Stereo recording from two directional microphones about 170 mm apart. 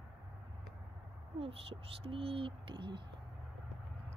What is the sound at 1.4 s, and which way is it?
Speech, 35° right (ahead or behind).